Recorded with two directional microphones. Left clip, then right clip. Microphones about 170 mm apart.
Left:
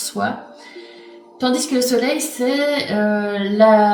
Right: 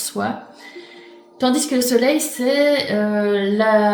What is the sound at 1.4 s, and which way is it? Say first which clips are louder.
A woman's voice: even; 45° right (ahead or behind).